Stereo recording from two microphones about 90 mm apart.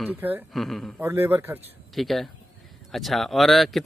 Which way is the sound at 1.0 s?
25° right (ahead or behind).